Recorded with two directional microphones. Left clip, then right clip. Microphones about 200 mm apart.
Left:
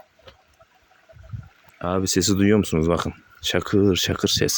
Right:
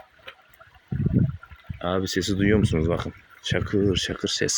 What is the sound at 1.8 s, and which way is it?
Speech, 20° left (ahead or behind).